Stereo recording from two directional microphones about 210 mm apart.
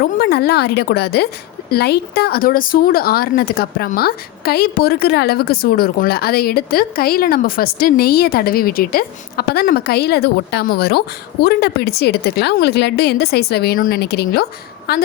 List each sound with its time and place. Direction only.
0.0 s speech: 50° left (ahead or behind)